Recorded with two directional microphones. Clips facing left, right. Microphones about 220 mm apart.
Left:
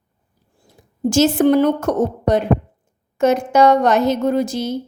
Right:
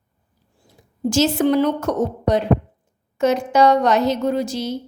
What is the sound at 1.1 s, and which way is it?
A woman's voice, 50° left (ahead or behind).